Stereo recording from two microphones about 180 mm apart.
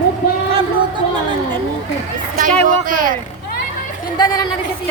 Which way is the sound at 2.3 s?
50° right (ahead or behind).